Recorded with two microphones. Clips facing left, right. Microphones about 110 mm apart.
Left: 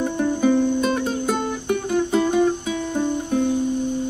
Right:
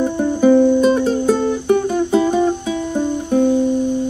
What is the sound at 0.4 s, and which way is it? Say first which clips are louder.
Music: right 8 dB; 25° right (ahead or behind).